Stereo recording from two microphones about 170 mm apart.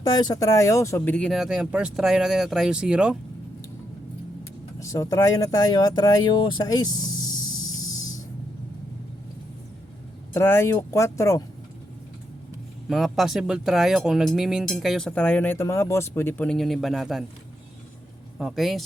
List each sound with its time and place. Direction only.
0.0 s speech: 25° left (ahead or behind); by 3.2 s 5° right (ahead or behind)
4.8 s speech: 20° left (ahead or behind)
10.3 s speech: 15° left (ahead or behind)
12.9 s speech: centre (ahead or behind)
18.3 s speech: centre (ahead or behind)